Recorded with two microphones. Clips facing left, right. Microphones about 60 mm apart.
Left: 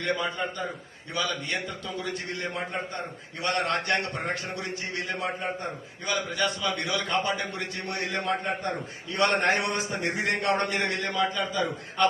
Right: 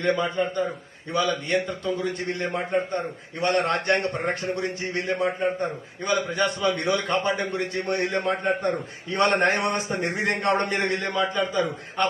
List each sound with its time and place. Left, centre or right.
0.0 s a man's voice: right